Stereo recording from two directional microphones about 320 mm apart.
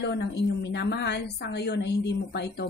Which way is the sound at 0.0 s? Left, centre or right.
Left.